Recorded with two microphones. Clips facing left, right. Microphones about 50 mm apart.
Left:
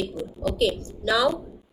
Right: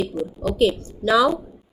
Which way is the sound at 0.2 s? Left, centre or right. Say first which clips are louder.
Right 6 dB; centre.